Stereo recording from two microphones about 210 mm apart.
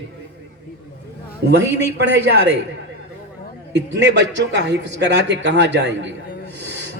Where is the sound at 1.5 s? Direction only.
55° right (ahead or behind).